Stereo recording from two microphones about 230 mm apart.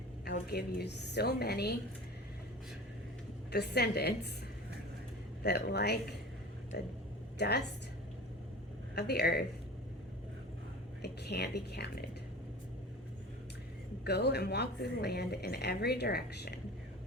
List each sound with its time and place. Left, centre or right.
0.3 s a woman's voice: left
3.5 s a woman's voice: left
5.4 s a woman's voice: left
9.0 s a woman's voice: left
11.0 s a woman's voice: left
14.0 s a woman's voice: left